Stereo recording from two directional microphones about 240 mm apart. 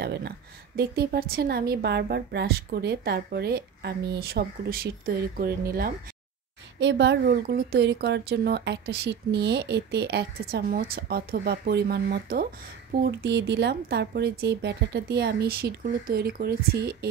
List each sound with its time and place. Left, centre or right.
0.0 s a woman's voice: right